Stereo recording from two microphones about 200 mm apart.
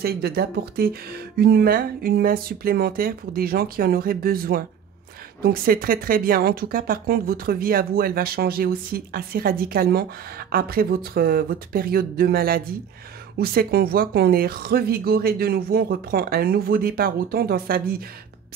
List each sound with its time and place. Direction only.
0.0 s speech: 50° right (ahead or behind)